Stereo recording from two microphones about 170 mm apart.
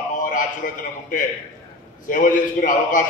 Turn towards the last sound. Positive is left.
turn(degrees=50)  # may be behind; listen again after turning